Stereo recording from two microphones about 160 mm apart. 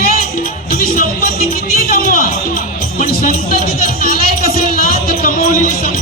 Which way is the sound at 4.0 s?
60° left (ahead or behind).